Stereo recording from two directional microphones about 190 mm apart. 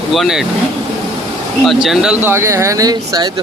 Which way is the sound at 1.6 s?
Centre (ahead or behind).